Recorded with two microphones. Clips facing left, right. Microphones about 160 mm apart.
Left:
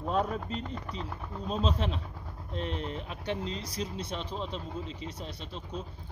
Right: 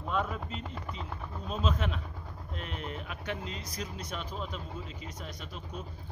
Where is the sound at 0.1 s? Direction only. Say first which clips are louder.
Left 3 dB; 40° left (ahead or behind).